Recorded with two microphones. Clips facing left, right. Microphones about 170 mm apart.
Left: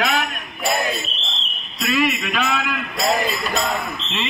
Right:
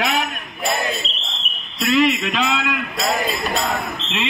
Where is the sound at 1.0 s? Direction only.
20° right (ahead or behind).